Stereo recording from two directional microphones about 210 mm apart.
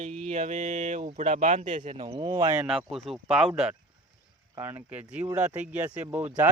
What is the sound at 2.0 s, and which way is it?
Speech, 20° right (ahead or behind).